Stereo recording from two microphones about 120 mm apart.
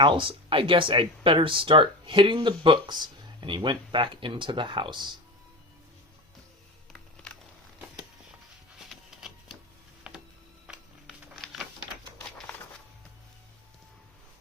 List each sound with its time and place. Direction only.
0.0 s speech: 45° right (ahead or behind)
8.8 s printer: 5° right (ahead or behind)
10.0 s a sound: 5° right (ahead or behind)